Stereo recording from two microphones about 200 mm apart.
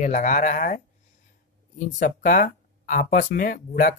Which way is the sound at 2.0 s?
40° left (ahead or behind).